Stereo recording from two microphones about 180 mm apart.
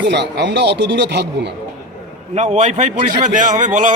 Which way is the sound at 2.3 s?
40° right (ahead or behind).